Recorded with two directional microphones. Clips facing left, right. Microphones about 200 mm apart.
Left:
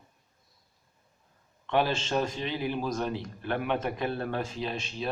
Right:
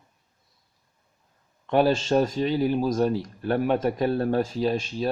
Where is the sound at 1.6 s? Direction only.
40° right (ahead or behind).